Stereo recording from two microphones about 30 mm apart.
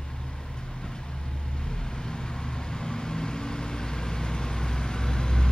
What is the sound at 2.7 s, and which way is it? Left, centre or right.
Vehicle, left.